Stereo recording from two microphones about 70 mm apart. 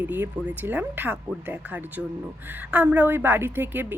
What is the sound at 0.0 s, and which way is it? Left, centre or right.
Speech, right.